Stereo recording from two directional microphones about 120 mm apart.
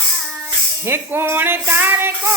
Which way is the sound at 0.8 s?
20° right (ahead or behind).